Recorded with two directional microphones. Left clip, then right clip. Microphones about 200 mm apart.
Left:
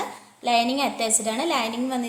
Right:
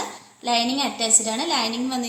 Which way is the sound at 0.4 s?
55° left (ahead or behind).